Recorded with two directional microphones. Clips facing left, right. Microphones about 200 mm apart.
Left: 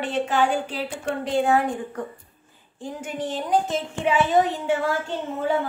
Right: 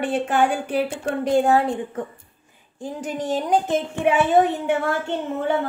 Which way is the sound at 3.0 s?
40° right (ahead or behind).